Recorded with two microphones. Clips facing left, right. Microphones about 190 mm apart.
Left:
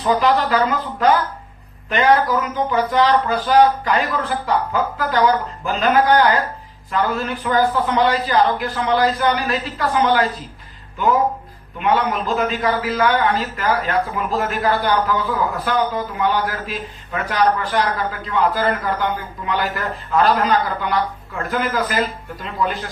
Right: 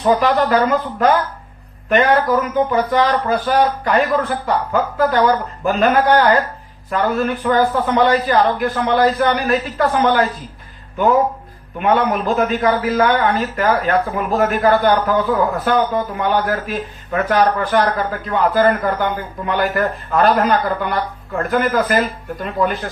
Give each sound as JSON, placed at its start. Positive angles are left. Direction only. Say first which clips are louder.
{"t": 0.0, "sound": "a man's voice", "louder": "right 2 dB", "side_deg": -50}
{"t": 6.9, "sound": "a man's voice", "louder": "right 3 dB", "side_deg": -40}
{"t": 11.8, "sound": "a man's voice", "louder": "right 3 dB", "side_deg": -50}